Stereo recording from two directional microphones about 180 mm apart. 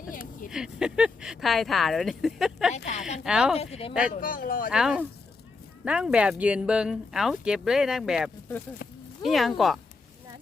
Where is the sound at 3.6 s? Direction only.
35° left (ahead or behind).